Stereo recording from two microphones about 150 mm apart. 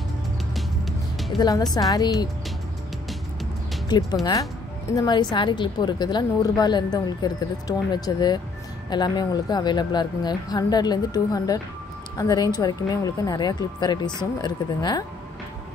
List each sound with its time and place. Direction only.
1.7 s a woman's voice: 25° left (ahead or behind)
3.9 s a woman's voice: 25° left (ahead or behind)